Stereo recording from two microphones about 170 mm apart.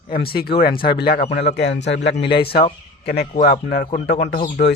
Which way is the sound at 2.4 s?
65° left (ahead or behind).